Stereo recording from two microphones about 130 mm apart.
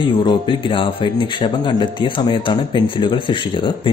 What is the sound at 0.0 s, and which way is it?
Speech, 35° left (ahead or behind).